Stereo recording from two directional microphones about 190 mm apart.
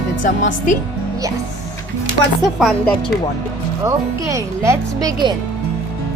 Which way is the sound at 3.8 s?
15° right (ahead or behind).